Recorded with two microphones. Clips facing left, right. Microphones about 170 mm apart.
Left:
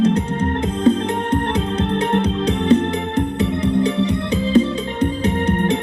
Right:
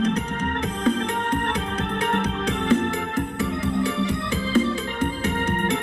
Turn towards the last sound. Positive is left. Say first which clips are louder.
# left 6 dB
turn(degrees=20)  # may be behind; listen again after turning